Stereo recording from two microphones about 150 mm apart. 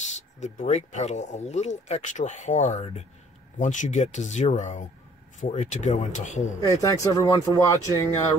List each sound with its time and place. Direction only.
0.4 s speech: 50° left (ahead or behind)
6.8 s speech: 20° left (ahead or behind)